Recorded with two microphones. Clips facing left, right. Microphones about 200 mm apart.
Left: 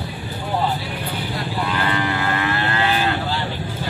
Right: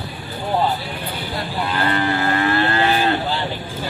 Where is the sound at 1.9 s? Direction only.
35° right (ahead or behind).